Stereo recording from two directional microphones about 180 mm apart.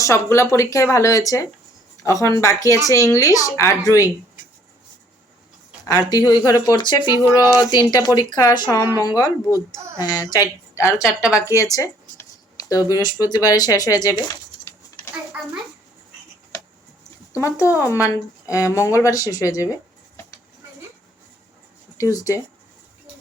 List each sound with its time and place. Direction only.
0.0 s speech: 15° left (ahead or behind)
5.8 s speech: 20° left (ahead or behind)
10.9 s speech: 5° right (ahead or behind)
11.3 s a sound: 15° left (ahead or behind)
12.9 s speech: 20° left (ahead or behind)
17.3 s speech: 15° left (ahead or behind)
21.9 s speech: 15° left (ahead or behind)